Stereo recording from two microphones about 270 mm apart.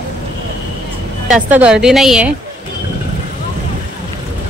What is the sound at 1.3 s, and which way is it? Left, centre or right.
A woman's voice, centre.